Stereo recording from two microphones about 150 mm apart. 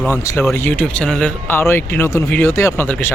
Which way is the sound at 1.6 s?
15° left (ahead or behind).